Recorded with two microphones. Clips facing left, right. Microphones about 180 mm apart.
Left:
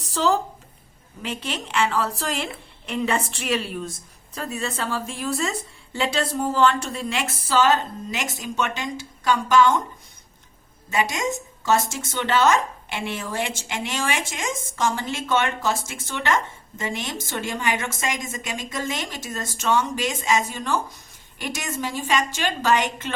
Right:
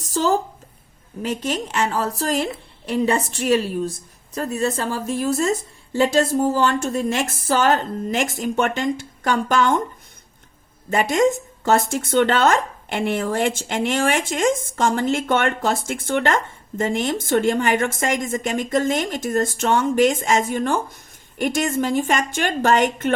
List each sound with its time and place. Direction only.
0.0 s a sound: 45° right (ahead or behind)
1.2 s a woman's voice: 40° right (ahead or behind)
10.8 s speech: 55° right (ahead or behind)